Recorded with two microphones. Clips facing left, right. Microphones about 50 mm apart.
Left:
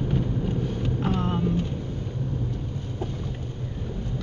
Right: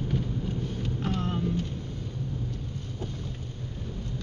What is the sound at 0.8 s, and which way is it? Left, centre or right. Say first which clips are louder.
Boat: left 4 dB; centre.